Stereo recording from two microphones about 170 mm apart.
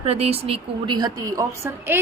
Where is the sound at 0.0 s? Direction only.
35° right (ahead or behind).